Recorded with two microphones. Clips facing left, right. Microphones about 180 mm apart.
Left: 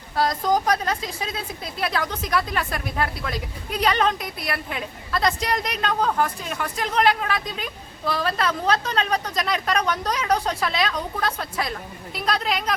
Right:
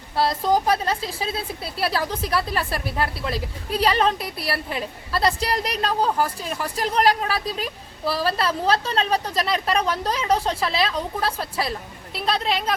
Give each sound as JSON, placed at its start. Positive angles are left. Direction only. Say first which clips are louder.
{"t": 0.2, "sound": "a woman's voice", "louder": "right 1 dB", "side_deg": -30}